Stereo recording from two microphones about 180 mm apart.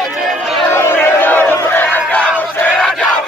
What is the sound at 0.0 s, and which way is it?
Chatter, centre (ahead or behind).